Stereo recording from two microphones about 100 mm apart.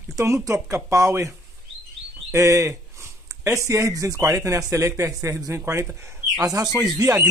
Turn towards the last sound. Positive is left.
turn(degrees=-40)  # may be behind; listen again after turning